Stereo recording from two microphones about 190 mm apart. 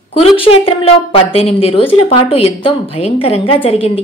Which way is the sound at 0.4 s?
30° left (ahead or behind).